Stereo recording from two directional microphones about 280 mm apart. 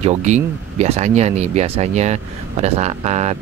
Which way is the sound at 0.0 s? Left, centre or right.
Right.